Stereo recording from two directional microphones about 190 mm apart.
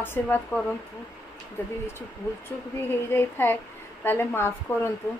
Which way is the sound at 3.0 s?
10° left (ahead or behind).